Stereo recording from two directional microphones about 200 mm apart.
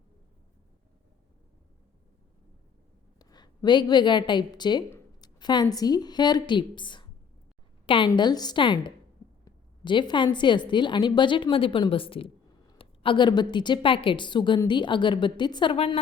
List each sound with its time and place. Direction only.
3.2 s a woman's voice: 20° left (ahead or behind)